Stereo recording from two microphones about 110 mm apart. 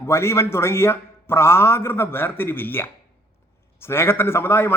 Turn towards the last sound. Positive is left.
turn(degrees=20)  # may be behind; listen again after turning